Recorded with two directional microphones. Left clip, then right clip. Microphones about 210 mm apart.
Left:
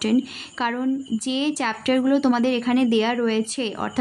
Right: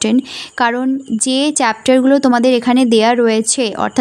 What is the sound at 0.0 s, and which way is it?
A woman's voice, 35° right (ahead or behind).